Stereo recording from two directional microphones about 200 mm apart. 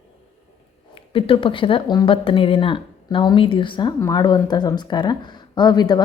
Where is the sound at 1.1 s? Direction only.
25° left (ahead or behind).